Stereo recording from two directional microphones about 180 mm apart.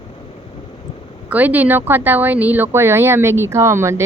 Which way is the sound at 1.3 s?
10° right (ahead or behind).